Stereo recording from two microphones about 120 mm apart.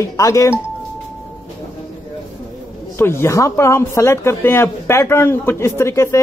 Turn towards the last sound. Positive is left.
turn(degrees=25)  # may be behind; listen again after turning